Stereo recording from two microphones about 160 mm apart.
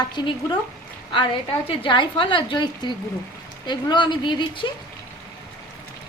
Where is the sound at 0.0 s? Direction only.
30° left (ahead or behind).